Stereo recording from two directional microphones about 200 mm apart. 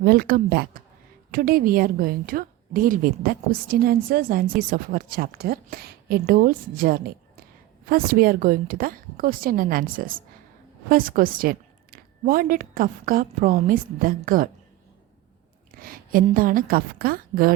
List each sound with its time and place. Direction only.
0.0 s a woman's voice: 50° right (ahead or behind)
15.8 s a woman's voice: 45° right (ahead or behind)